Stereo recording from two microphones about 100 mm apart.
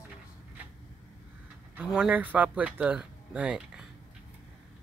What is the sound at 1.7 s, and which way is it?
Speech, 10° right (ahead or behind).